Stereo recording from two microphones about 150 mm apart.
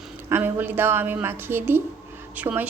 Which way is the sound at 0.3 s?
15° right (ahead or behind).